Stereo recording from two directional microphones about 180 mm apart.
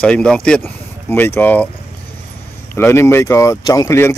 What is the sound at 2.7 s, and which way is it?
Speech, 15° left (ahead or behind).